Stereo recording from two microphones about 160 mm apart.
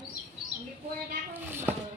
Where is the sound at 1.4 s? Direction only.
15° right (ahead or behind).